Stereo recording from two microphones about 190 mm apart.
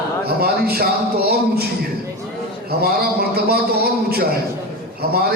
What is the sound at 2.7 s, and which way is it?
Speech, 55° right (ahead or behind).